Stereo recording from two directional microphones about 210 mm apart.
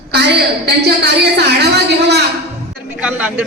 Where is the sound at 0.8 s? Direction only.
50° right (ahead or behind).